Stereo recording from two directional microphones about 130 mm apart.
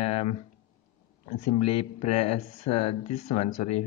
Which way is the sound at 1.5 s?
50° left (ahead or behind).